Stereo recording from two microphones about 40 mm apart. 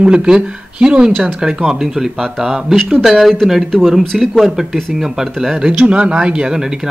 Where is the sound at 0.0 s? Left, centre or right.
Right; by 4.6 s centre.